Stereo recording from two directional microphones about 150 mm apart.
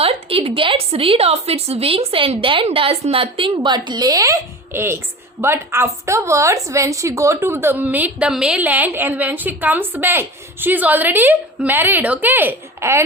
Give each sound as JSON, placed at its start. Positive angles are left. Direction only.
{"t": 0.0, "sound": "a woman's voice", "side_deg": -40}